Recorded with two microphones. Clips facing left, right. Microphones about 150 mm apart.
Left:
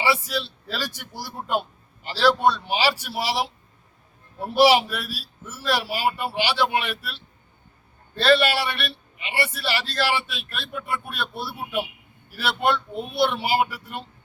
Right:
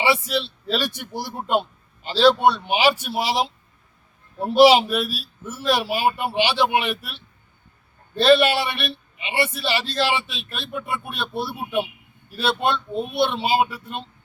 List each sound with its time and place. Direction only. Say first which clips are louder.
0.0 s a man's voice: right 3 dB; 25° right (ahead or behind)